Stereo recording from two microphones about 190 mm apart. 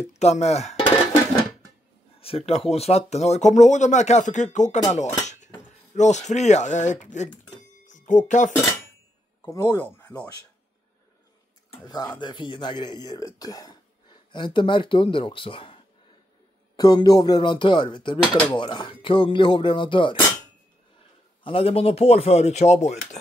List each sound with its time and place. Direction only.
0.1 s speech: 35° left (ahead or behind)
2.1 s speech: 30° left (ahead or behind)
7.5 s a sound: 40° left (ahead or behind)
9.4 s speech: 10° left (ahead or behind)
11.8 s speech: 20° left (ahead or behind)
21.5 s speech: 30° left (ahead or behind)